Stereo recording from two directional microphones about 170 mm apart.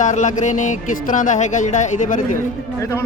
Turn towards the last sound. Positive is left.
turn(degrees=15)  # may be behind; listen again after turning